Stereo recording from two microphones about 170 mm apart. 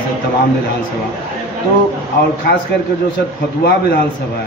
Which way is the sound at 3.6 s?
70° left (ahead or behind).